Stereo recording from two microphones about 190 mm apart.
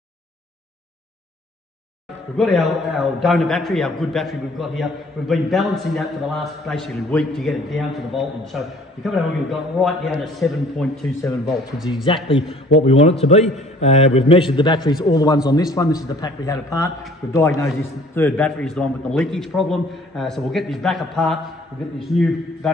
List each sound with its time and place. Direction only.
2.3 s a man's voice: centre (ahead or behind)
11.9 s a man's voice: 25° left (ahead or behind); by 21.4 s centre (ahead or behind)